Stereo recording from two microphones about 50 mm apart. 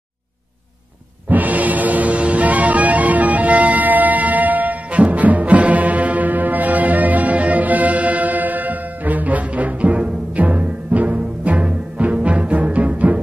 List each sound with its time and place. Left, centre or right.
1.3 s music: right